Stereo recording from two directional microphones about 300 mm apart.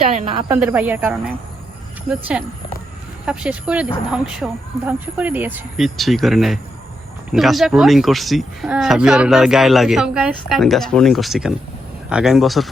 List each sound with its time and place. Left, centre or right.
0.0 s a woman's voice: right
0.4 s speech: centre